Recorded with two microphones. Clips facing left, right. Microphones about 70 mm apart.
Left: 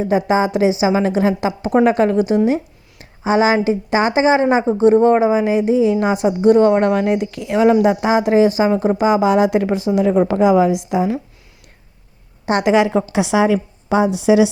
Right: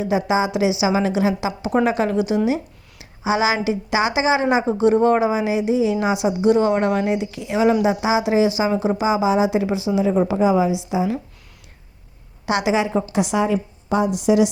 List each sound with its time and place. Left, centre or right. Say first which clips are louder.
0.3 s a woman's voice: left 4 dB; left
10.2 s a woman's voice: left 4 dB; left
12.5 s speech: left 4 dB; left
12.7 s a woman's voice: left 5 dB; left
13.1 s a woman's voice: left 5 dB; left